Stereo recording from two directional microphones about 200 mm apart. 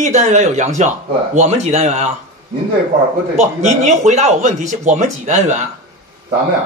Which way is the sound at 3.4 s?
35° right (ahead or behind).